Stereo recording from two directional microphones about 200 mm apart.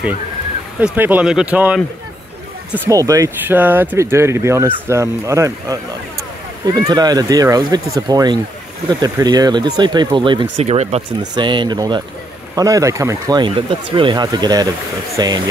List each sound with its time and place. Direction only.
0.7 s speech: 10° right (ahead or behind)
2.8 s speech: 15° right (ahead or behind)